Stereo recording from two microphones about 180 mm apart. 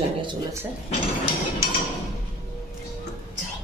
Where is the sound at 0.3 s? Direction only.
15° right (ahead or behind).